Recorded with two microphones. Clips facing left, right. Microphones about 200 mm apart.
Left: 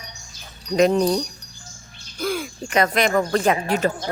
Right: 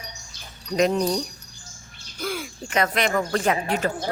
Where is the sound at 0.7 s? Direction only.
30° left (ahead or behind).